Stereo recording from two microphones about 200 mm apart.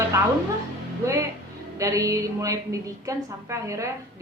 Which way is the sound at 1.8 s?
15° right (ahead or behind).